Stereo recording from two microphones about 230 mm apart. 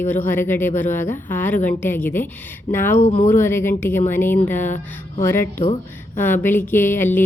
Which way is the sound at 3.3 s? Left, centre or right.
Centre.